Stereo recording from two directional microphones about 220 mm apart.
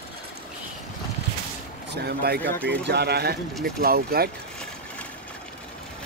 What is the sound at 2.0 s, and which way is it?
Speech, 45° right (ahead or behind).